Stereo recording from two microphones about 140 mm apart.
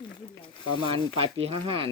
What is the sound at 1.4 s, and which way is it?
Speech, 40° right (ahead or behind).